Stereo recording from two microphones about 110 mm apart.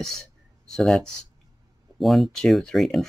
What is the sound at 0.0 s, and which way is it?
Speech, 5° left (ahead or behind).